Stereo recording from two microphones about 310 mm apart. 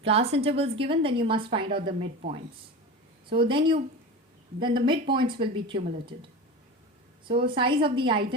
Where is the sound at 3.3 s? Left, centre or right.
Centre.